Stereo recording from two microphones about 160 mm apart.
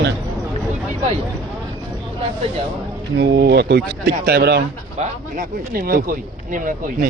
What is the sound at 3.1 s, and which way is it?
Speech, 90° right.